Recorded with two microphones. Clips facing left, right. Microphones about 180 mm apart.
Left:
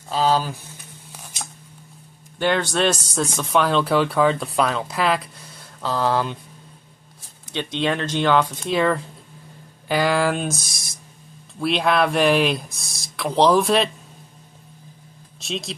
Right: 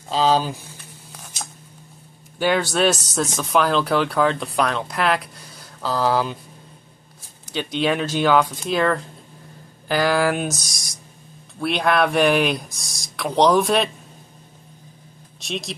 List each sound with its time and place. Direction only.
0.1 s speech: 20° right (ahead or behind)
2.3 s speech: 5° right (ahead or behind)
7.5 s speech: 5° right (ahead or behind)
15.4 s speech: centre (ahead or behind)